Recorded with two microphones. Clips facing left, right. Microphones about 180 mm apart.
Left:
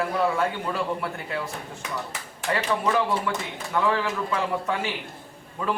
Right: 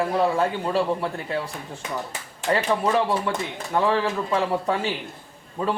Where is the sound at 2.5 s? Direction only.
30° right (ahead or behind).